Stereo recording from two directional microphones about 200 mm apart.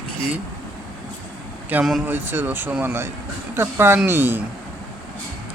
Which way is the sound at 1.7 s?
5° right (ahead or behind).